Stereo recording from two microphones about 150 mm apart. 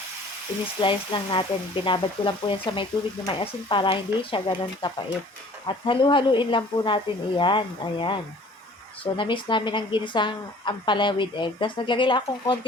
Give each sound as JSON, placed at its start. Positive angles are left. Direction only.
{"t": 0.8, "sound": "a woman's voice", "side_deg": 35}